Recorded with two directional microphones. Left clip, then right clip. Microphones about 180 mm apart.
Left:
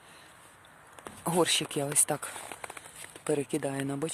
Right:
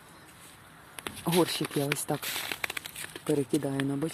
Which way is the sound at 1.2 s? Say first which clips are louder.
Right 1 dB; 25° left (ahead or behind).